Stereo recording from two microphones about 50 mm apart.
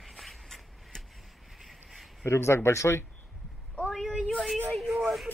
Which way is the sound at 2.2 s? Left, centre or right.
Left.